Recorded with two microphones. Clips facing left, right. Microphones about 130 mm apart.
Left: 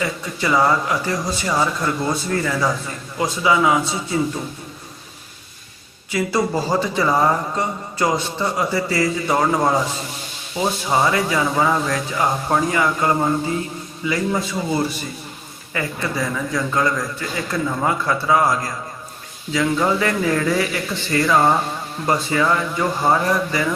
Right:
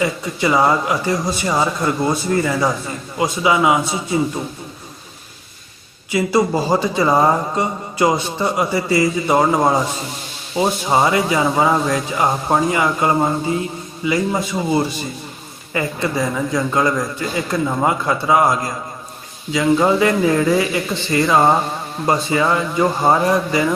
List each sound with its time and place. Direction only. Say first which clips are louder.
0.0 s a man's voice: right 4 dB; 20° right (ahead or behind)
6.1 s a man's voice: right 4 dB; 15° right (ahead or behind)
15.7 s a man's voice: right 4 dB; 20° right (ahead or behind)